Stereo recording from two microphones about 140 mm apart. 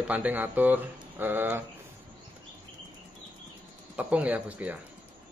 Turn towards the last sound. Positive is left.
turn(degrees=-10)  # may be behind; listen again after turning